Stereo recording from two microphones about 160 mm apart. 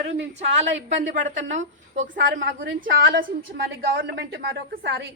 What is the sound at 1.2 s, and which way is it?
A woman's voice, 50° right (ahead or behind).